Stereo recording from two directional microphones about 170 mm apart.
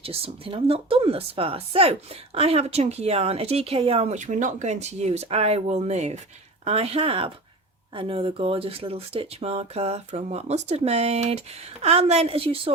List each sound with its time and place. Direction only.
0.0 s a woman's voice: 35° right (ahead or behind)